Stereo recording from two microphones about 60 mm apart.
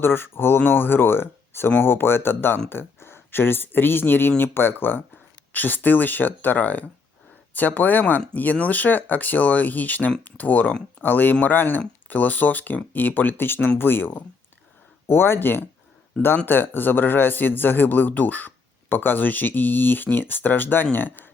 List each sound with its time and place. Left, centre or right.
0.0 s a man's voice: left